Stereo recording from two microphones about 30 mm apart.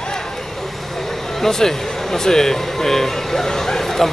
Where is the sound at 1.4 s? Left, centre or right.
Centre.